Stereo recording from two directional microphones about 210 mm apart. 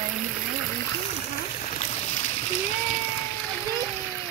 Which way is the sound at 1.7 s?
30° left (ahead or behind).